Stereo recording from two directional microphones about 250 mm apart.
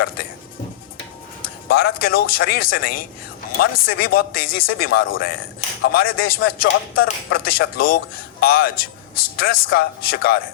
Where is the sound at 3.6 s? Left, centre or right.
Left.